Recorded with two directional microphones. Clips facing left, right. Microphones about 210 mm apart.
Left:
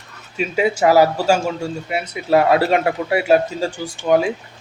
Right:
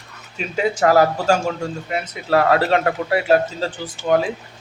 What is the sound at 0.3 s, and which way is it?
Speech, 10° left (ahead or behind).